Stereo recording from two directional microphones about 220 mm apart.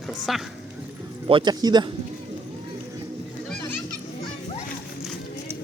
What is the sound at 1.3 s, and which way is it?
Speech, 20° right (ahead or behind).